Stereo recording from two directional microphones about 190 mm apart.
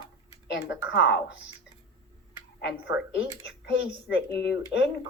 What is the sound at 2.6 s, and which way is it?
Speech, 65° left (ahead or behind).